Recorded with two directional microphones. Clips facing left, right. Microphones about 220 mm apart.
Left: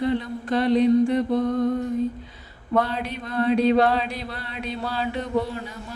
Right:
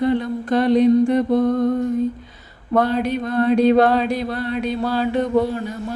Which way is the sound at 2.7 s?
45° right (ahead or behind).